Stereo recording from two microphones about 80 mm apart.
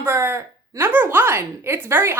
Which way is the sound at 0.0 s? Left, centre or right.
Right.